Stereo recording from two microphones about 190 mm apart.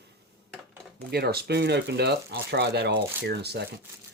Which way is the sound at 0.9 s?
55° right (ahead or behind).